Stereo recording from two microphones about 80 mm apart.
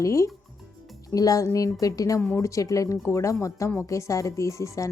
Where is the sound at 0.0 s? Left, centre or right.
Left.